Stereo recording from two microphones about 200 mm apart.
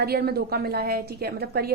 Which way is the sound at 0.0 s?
50° right (ahead or behind).